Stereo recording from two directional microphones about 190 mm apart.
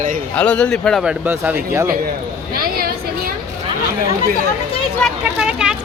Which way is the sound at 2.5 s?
50° right (ahead or behind).